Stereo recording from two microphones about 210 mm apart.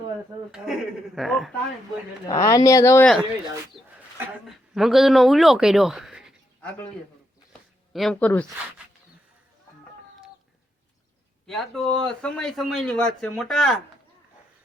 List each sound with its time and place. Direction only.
0.5 s a man's voice: centre (ahead or behind)
2.2 s speech: 15° left (ahead or behind)
4.4 s speech: centre (ahead or behind)
7.9 s a man's voice: centre (ahead or behind)
11.4 s a man's voice: centre (ahead or behind)